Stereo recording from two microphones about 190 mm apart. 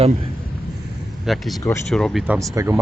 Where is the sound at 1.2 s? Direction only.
Centre (ahead or behind).